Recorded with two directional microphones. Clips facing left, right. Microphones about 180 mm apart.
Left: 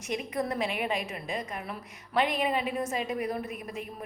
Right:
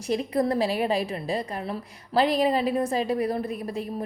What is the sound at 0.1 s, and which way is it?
A woman's voice, 35° right (ahead or behind).